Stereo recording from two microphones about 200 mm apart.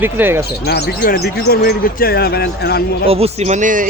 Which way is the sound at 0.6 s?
55° left (ahead or behind).